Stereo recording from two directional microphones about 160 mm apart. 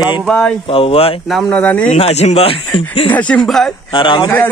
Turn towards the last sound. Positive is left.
turn(degrees=30)  # may be behind; listen again after turning